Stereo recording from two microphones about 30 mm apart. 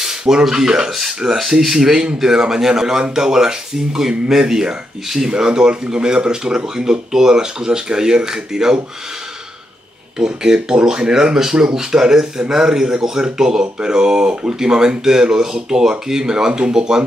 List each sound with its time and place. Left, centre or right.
0.0 s speech: centre
1.2 s speech: right
1.6 s speech: centre
10.1 s speech: right